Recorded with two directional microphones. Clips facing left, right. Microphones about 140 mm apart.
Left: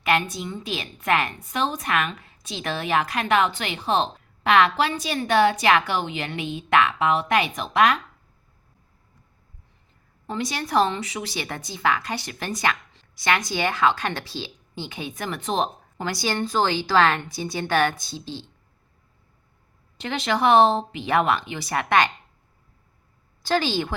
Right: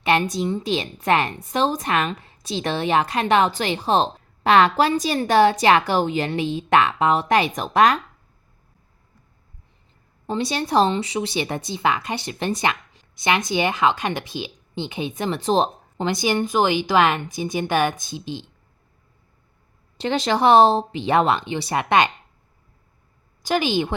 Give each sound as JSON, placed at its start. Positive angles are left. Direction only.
{"t": 0.0, "sound": "a woman's voice", "side_deg": -30}
{"t": 10.2, "sound": "speech", "side_deg": -25}
{"t": 20.0, "sound": "speech", "side_deg": -35}
{"t": 23.4, "sound": "speech", "side_deg": -15}